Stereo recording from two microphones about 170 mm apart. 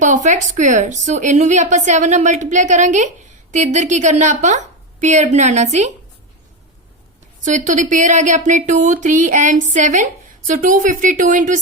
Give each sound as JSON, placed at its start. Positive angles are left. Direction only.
{"t": 0.0, "sound": "speech", "side_deg": -50}
{"t": 7.4, "sound": "speech", "side_deg": -45}